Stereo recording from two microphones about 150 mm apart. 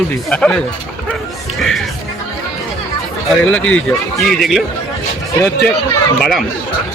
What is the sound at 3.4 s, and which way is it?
Speech, 10° left (ahead or behind).